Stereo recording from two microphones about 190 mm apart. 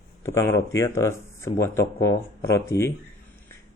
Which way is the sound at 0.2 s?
15° left (ahead or behind).